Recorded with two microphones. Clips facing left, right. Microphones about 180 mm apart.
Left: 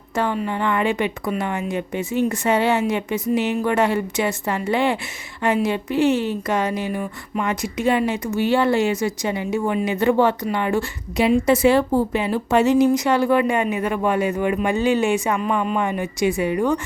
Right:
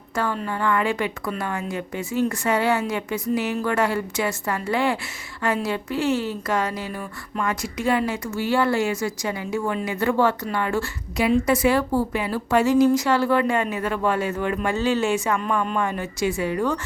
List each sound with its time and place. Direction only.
0.4 s speech: 20° left (ahead or behind)